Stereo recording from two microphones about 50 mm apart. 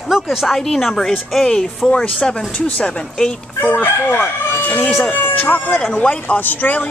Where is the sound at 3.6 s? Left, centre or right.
Left.